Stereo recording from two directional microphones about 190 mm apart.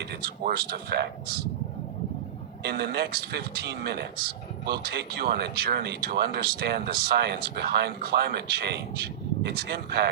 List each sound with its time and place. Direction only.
0.4 s speech: 60° right (ahead or behind)
2.6 s speech: 55° right (ahead or behind)